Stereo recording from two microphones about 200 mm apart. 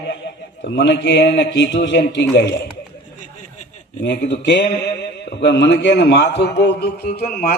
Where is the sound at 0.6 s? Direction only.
60° left (ahead or behind).